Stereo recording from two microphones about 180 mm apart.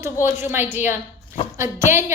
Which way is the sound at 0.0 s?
15° right (ahead or behind).